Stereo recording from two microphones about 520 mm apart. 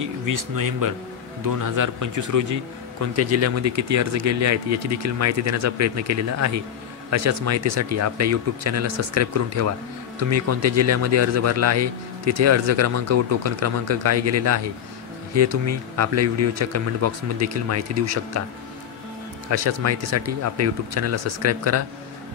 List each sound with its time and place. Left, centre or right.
0.0 s a man's voice: right
19.5 s a man's voice: right